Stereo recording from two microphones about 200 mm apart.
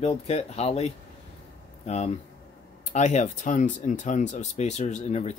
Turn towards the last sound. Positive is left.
turn(degrees=35)  # may be behind; listen again after turning